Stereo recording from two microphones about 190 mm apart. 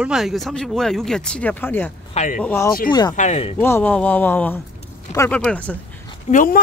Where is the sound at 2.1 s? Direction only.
40° left (ahead or behind).